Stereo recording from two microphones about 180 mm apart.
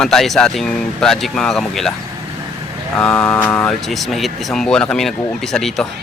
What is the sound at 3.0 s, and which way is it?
Speech, 5° left (ahead or behind).